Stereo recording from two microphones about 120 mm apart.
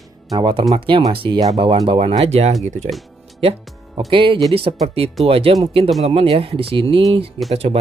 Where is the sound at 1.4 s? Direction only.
30° right (ahead or behind).